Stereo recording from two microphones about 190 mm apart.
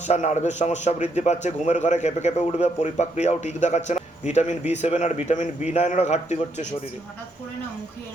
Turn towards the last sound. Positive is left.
turn(degrees=35)  # may be behind; listen again after turning